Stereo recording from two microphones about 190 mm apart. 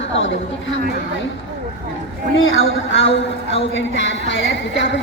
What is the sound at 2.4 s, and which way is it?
A woman's voice, 90° left.